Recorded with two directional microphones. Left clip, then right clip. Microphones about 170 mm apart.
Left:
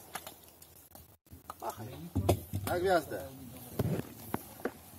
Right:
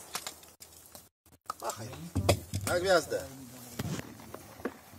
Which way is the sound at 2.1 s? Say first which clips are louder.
Right 3 dB; 20° right (ahead or behind).